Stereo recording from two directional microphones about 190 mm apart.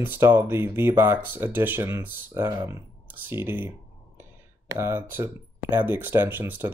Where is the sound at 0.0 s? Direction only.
10° right (ahead or behind).